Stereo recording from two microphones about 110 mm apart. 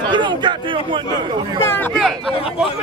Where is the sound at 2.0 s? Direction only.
Centre (ahead or behind).